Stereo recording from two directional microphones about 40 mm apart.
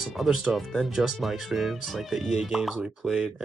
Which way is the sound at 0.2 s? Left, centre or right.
Centre.